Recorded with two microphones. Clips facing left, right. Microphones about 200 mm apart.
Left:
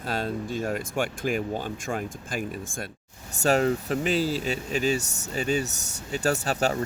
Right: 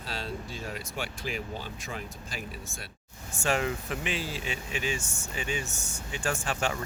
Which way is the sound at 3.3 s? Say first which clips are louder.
Left 7 dB; 40° left (ahead or behind).